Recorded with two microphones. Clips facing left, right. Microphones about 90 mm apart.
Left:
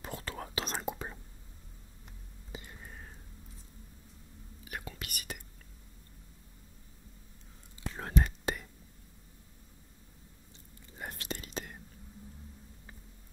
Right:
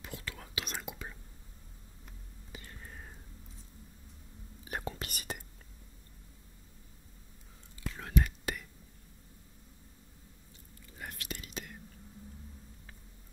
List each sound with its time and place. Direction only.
0.0 s whispering: 35° left (ahead or behind)
2.5 s whispering: 20° left (ahead or behind)
2.8 s a sound: centre (ahead or behind)
4.6 s whispering: 35° right (ahead or behind)
7.8 s whispering: 35° left (ahead or behind)
11.0 s whispering: 30° left (ahead or behind)